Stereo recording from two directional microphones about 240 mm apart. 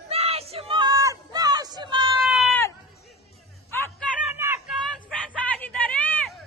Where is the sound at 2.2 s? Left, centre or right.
Centre.